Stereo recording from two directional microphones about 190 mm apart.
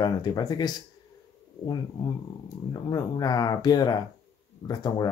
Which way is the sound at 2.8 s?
20° left (ahead or behind).